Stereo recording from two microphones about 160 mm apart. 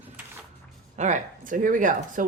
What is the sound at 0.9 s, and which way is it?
Speech, 50° right (ahead or behind).